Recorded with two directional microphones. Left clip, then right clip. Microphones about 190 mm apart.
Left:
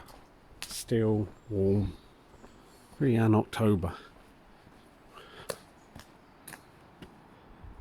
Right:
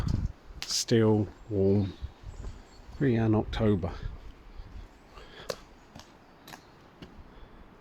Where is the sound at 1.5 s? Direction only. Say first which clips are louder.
Right 2 dB; 5° right (ahead or behind).